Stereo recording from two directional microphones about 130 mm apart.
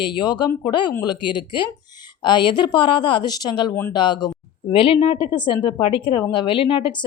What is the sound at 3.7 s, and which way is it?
Speech, 15° left (ahead or behind).